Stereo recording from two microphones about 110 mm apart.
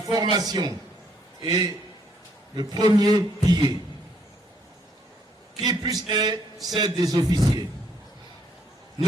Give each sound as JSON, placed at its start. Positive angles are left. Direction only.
{"t": 0.0, "sound": "a man's voice", "side_deg": -40}
{"t": 5.6, "sound": "a man's voice", "side_deg": -35}